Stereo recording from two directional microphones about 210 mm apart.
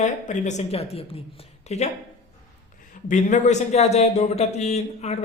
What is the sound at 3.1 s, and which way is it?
A woman's voice, 35° left (ahead or behind).